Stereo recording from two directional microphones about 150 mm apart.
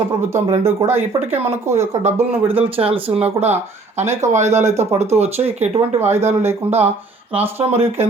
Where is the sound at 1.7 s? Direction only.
50° right (ahead or behind).